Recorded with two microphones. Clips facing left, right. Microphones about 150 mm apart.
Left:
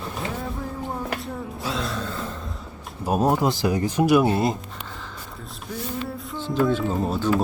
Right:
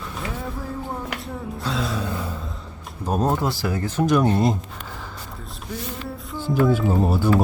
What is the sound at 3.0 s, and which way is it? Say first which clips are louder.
Speech: left 2 dB; 10° left (ahead or behind).